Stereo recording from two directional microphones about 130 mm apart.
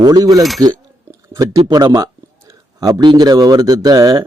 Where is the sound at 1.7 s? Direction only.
30° right (ahead or behind).